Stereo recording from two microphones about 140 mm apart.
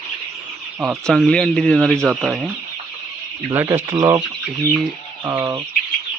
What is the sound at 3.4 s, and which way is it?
Speech, 20° right (ahead or behind).